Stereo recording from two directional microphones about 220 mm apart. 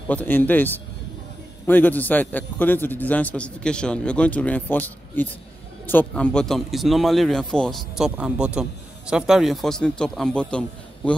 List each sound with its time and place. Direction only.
0.1 s a man's voice: 10° left (ahead or behind)